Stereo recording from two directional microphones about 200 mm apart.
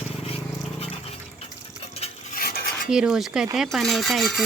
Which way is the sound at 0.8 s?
30° left (ahead or behind).